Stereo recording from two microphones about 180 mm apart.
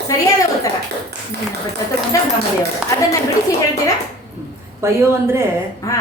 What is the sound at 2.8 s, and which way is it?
Speech, 5° right (ahead or behind).